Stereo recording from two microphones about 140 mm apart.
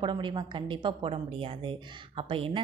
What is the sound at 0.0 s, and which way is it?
A woman's voice, 35° right (ahead or behind).